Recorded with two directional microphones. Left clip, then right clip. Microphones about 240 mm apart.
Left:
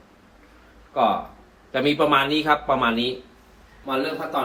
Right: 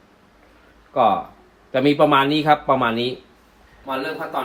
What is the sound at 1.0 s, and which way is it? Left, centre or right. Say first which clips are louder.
A man's voice: right 3 dB; right.